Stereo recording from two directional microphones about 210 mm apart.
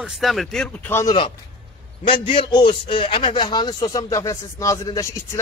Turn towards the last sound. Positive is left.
turn(degrees=15)  # may be behind; listen again after turning